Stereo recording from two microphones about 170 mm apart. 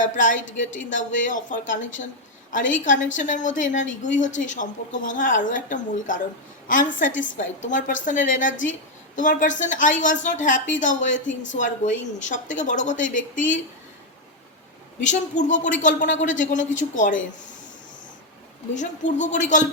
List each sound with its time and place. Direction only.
0.0 s a woman's voice: 50° left (ahead or behind)
15.0 s a woman's voice: 45° left (ahead or behind)
18.7 s a woman's voice: 45° left (ahead or behind)